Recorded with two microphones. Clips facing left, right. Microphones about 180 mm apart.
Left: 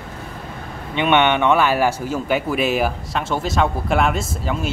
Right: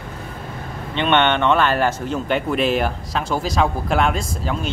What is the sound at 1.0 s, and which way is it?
Speech, 10° left (ahead or behind).